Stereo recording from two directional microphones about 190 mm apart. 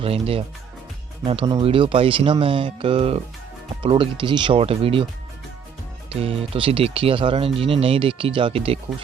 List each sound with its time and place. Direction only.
0.0 s speech: 30° right (ahead or behind)
6.1 s speech: 30° right (ahead or behind)